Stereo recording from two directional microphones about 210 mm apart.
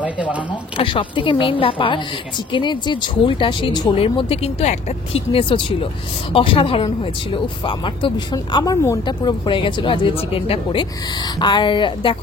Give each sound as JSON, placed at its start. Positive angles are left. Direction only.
{"t": 0.0, "sound": "speech", "side_deg": -5}
{"t": 0.7, "sound": "a woman's voice", "side_deg": 25}